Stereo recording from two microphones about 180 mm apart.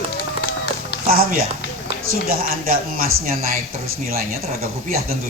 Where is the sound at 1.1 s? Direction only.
55° right (ahead or behind).